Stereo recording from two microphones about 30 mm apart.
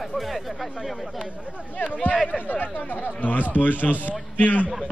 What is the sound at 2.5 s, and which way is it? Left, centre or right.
Speech, left.